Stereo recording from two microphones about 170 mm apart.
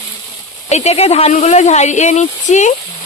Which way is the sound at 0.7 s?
40° left (ahead or behind).